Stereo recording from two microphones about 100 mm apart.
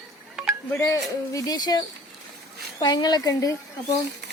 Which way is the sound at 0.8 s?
35° left (ahead or behind).